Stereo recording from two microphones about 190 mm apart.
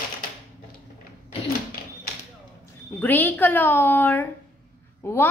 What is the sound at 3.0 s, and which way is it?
A woman's voice, 10° left (ahead or behind).